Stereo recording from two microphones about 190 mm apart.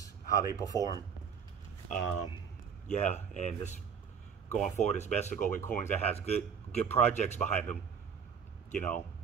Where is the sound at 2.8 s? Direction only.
40° left (ahead or behind).